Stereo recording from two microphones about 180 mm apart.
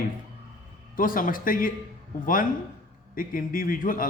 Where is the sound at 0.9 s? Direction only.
50° left (ahead or behind).